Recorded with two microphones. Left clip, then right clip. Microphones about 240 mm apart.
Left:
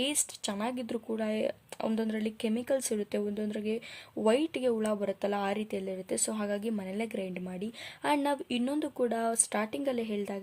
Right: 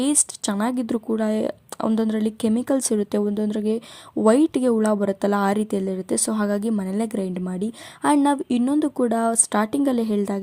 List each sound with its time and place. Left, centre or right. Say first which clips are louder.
0.0 s speech: right 9 dB; right